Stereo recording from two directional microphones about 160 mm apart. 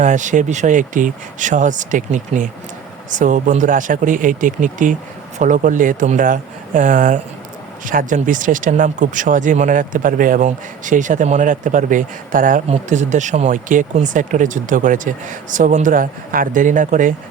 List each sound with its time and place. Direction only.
0.0 s speech: 50° right (ahead or behind)